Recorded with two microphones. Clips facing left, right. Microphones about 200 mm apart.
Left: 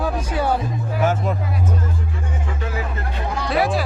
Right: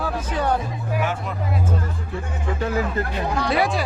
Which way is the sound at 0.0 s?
10° left (ahead or behind).